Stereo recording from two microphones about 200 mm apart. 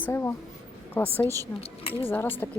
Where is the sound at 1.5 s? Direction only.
30° left (ahead or behind).